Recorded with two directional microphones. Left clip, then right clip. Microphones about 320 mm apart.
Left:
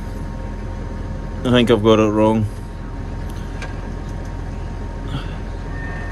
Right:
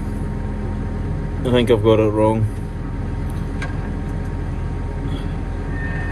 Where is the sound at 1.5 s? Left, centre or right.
Left.